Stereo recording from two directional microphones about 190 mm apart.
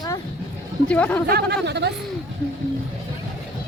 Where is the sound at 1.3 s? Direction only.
60° right (ahead or behind).